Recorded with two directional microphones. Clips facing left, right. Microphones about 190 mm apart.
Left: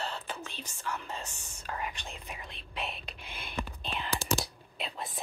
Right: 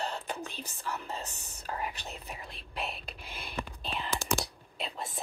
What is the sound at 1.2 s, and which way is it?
Speech, 10° left (ahead or behind).